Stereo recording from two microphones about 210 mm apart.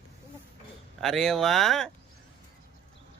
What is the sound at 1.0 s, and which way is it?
Speech, centre (ahead or behind).